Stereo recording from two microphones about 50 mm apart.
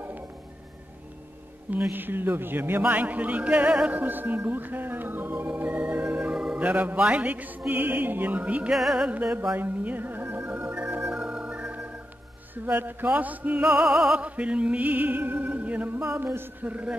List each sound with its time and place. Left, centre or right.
1.9 s a man's voice: right
2.8 s speech: right
3.9 s music: right
4.4 s organ: right; by 6.6 s centre
6.6 s music: right
7.0 s speech: right
7.7 s music: right
9.3 s speech: right
9.6 s music: right
10.6 s organ: right
12.5 s music: right
13.7 s music: centre
14.1 s music: right
16.6 s speech: right